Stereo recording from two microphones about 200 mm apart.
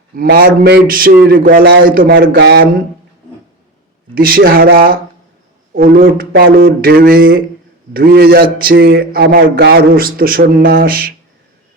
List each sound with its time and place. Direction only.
0.2 s a man's voice: 50° right (ahead or behind)
4.1 s a man's voice: 45° right (ahead or behind)